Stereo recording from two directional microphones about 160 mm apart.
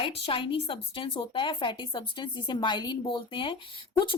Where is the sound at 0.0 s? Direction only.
35° left (ahead or behind).